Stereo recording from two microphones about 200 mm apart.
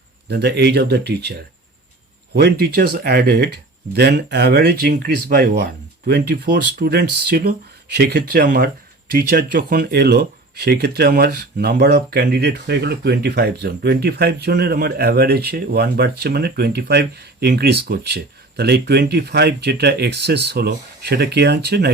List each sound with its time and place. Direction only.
0.3 s speech: 55° right (ahead or behind)
2.3 s speech: 50° right (ahead or behind)